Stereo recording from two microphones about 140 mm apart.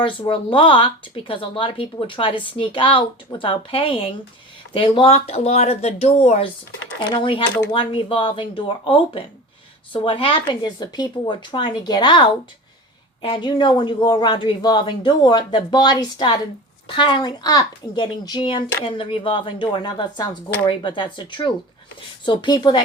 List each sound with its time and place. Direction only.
0.0 s speech: 40° left (ahead or behind)
7.1 s speech: 35° left (ahead or behind)